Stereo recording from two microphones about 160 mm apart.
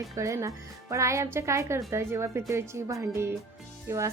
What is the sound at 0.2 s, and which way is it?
A woman's voice, 20° right (ahead or behind).